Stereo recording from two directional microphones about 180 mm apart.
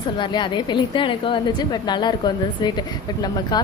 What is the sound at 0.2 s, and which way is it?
Speech, 25° left (ahead or behind).